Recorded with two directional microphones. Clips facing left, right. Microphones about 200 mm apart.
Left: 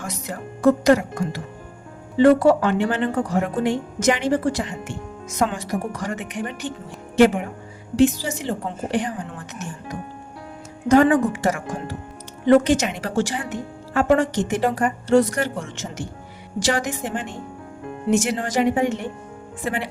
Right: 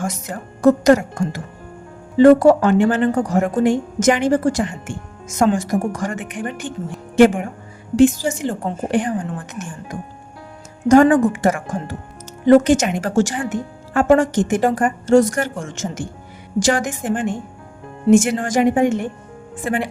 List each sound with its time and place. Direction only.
0.0 s a woman's voice: 45° right (ahead or behind)